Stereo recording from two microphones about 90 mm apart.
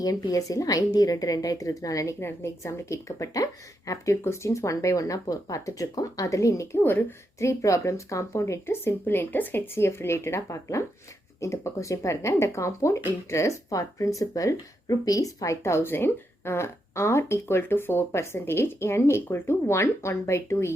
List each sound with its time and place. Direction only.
0.0 s a woman's voice: 45° left (ahead or behind)